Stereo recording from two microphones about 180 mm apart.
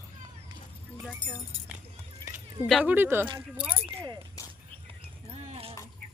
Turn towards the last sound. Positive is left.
turn(degrees=-30)  # may be behind; listen again after turning